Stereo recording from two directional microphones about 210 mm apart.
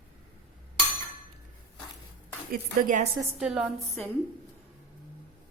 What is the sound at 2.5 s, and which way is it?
Speech, 40° right (ahead or behind).